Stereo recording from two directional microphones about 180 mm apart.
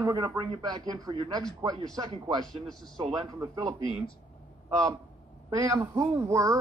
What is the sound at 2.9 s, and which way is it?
Speech, 20° right (ahead or behind).